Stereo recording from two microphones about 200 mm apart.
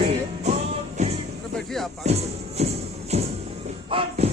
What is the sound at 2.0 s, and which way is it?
Speech, 30° right (ahead or behind).